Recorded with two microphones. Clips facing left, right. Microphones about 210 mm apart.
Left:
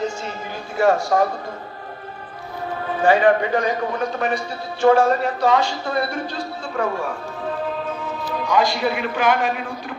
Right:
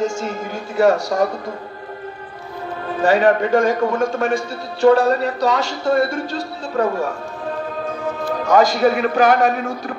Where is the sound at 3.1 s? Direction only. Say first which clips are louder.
Right 5 dB; 45° right (ahead or behind).